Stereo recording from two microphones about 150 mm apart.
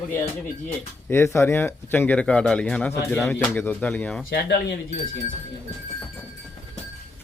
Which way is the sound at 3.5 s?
15° left (ahead or behind).